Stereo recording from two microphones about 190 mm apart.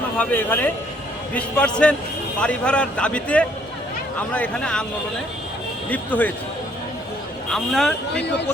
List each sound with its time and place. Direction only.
0.2 s a man's voice: 10° left (ahead or behind)
5.9 s a man's voice: 10° left (ahead or behind)
7.5 s a man's voice: centre (ahead or behind)
8.1 s speech: 65° left (ahead or behind)